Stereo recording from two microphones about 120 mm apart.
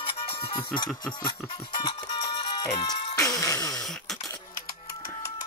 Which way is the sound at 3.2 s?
25° left (ahead or behind).